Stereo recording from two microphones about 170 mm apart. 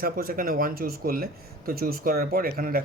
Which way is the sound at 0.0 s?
60° right (ahead or behind).